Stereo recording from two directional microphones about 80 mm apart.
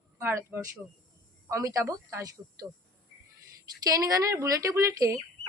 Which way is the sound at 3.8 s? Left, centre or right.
Right.